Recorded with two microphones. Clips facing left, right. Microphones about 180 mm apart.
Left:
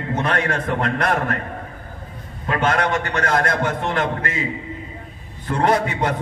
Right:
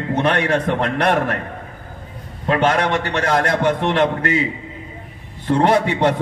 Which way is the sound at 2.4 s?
30° right (ahead or behind).